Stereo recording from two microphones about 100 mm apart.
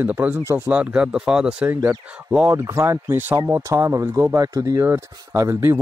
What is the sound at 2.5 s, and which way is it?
Speech, 30° right (ahead or behind).